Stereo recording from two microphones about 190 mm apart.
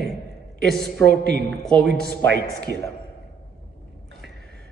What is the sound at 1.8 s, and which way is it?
Speech, 60° right (ahead or behind).